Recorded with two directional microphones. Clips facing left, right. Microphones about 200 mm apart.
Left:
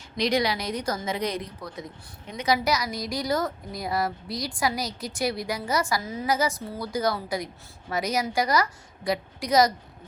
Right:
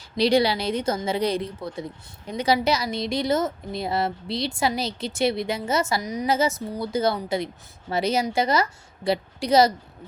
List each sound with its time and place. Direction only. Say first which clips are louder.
0.2 s a woman's voice: right 5 dB; 30° right (ahead or behind)